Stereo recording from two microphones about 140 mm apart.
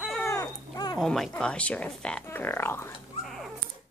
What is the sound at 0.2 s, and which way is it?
Dog, 20° left (ahead or behind).